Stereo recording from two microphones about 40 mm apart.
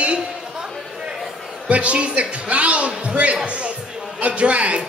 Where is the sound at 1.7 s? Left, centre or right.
Right.